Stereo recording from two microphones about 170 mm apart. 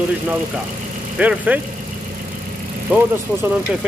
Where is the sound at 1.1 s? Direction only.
10° right (ahead or behind).